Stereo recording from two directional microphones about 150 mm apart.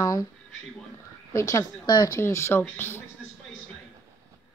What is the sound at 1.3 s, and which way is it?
A woman's voice, 20° left (ahead or behind).